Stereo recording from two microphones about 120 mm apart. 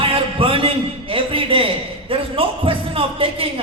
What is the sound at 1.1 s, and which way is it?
A man's voice, 50° right (ahead or behind).